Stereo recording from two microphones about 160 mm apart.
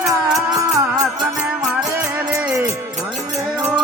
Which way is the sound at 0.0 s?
20° right (ahead or behind).